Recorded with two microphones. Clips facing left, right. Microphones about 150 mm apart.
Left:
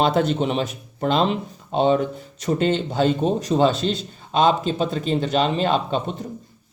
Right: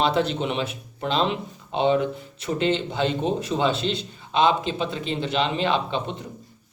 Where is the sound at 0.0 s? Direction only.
45° left (ahead or behind).